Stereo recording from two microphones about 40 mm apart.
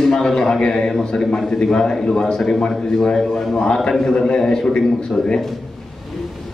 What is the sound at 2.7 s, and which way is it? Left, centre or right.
Speech, centre.